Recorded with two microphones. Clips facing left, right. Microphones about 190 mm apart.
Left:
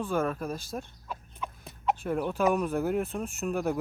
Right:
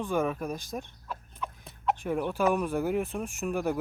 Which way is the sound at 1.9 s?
15° right (ahead or behind).